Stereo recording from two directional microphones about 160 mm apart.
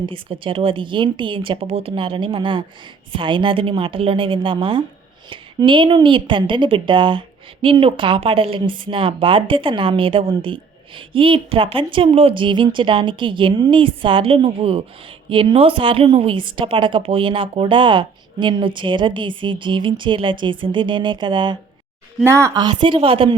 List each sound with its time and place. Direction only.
0.0 s a woman's voice: 30° right (ahead or behind)
22.2 s a woman's voice: 20° right (ahead or behind)
22.8 s a woman's voice: 35° right (ahead or behind)